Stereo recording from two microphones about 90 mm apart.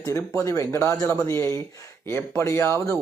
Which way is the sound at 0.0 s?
30° left (ahead or behind).